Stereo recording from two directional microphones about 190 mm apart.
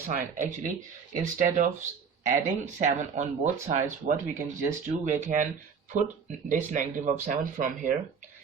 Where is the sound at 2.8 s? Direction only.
40° right (ahead or behind).